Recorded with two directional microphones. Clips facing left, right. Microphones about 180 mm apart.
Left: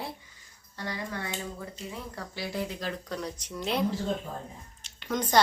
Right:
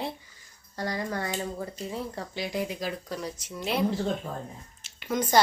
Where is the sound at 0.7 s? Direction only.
40° right (ahead or behind).